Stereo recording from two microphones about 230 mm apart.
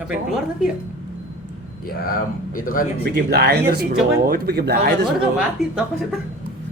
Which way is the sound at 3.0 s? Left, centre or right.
Right.